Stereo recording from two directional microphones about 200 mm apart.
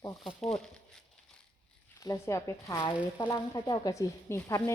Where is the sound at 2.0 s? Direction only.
15° left (ahead or behind).